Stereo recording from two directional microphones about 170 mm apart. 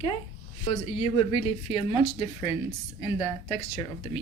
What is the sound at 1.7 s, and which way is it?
Speech, 30° left (ahead or behind).